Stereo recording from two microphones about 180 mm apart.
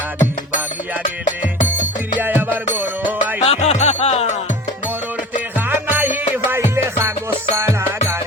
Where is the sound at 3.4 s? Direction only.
40° left (ahead or behind).